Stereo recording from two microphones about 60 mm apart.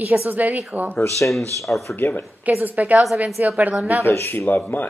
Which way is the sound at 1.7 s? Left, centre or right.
Left.